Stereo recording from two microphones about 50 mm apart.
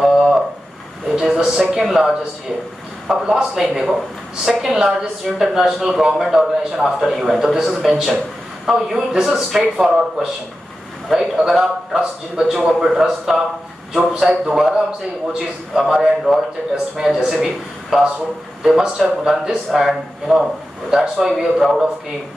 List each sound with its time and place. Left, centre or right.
0.0 s a sound: centre
1.7 s a man's voice: centre
12.0 s speech: centre
12.6 s speech: centre
14.5 s speech: centre
21.3 s speech: centre